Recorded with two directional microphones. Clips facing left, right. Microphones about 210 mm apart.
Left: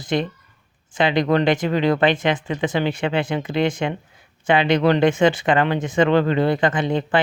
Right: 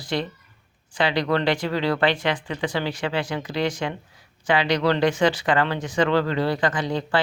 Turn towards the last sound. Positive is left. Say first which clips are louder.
# left 4 dB
turn(degrees=20)  # may be behind; listen again after turning